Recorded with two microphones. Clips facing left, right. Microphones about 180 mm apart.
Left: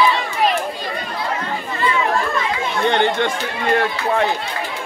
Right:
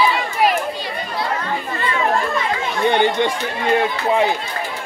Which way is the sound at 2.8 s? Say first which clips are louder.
Right 1 dB; 10° right (ahead or behind).